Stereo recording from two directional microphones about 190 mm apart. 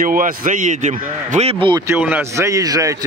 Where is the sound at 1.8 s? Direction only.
10° right (ahead or behind).